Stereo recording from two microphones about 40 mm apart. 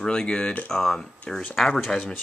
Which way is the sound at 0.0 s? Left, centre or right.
Centre.